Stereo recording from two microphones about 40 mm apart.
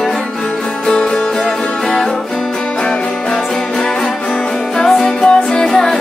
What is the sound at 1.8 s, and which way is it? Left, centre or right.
Music, centre.